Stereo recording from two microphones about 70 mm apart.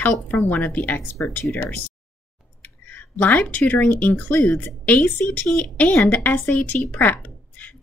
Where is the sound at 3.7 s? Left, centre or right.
Left.